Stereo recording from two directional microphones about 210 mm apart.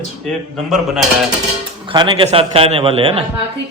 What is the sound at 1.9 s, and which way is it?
A man's voice, 20° right (ahead or behind).